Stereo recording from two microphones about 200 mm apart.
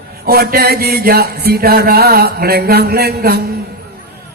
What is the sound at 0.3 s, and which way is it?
Chant, 50° right (ahead or behind).